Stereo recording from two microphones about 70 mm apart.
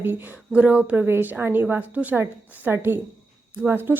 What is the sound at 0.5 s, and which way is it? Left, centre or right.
Speech, centre.